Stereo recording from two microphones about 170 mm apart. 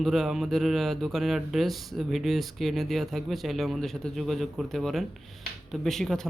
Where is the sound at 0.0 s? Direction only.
Centre (ahead or behind).